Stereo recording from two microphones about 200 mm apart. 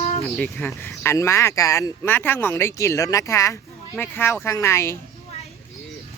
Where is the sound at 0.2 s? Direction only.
10° left (ahead or behind).